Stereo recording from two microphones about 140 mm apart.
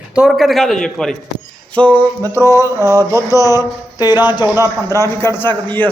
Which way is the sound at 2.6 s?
20° right (ahead or behind).